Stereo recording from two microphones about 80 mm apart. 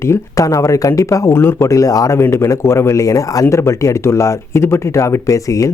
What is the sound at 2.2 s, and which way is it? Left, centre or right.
Speech, left.